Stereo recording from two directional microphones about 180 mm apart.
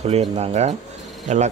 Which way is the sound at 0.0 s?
35° right (ahead or behind).